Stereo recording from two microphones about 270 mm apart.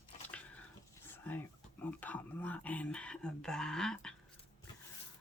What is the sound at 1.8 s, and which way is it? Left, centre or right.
Speech, centre.